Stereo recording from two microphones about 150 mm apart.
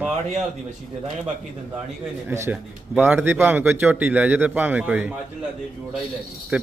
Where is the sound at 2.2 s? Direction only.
15° right (ahead or behind).